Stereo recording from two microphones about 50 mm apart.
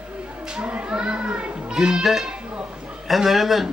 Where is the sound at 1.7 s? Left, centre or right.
Centre.